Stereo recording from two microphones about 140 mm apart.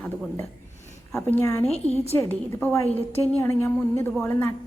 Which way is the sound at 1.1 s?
15° left (ahead or behind).